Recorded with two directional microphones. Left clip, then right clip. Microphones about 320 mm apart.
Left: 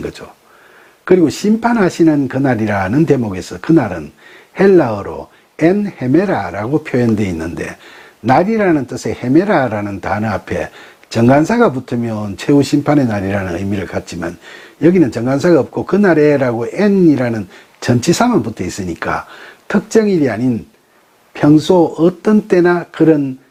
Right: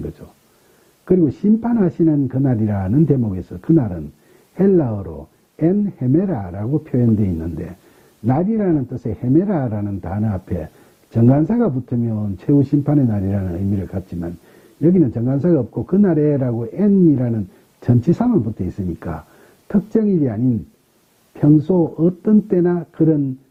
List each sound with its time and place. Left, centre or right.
1.0 s speech: centre
21.3 s speech: centre
21.7 s speech: left
22.2 s speech: centre